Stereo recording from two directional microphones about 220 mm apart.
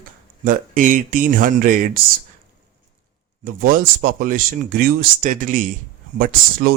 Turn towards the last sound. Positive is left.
turn(degrees=-40)  # may be behind; listen again after turning